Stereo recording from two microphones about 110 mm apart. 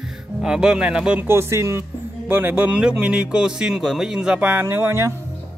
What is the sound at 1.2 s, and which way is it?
Speech, 20° right (ahead or behind).